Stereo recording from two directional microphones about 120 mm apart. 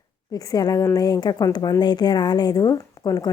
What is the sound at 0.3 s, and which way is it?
Speech, 30° left (ahead or behind).